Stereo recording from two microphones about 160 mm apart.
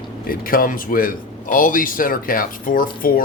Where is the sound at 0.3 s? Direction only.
65° left (ahead or behind).